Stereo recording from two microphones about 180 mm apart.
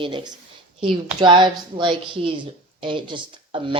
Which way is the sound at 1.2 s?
25° right (ahead or behind).